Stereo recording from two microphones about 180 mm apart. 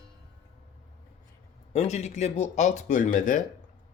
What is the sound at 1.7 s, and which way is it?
Speech, 40° left (ahead or behind).